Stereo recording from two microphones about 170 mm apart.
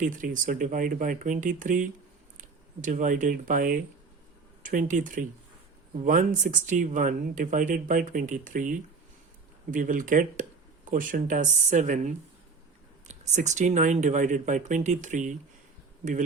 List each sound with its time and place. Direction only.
0.0 s speech: 50° right (ahead or behind)